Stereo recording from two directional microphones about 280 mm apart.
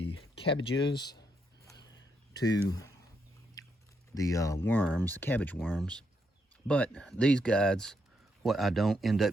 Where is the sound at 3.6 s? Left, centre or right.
Centre.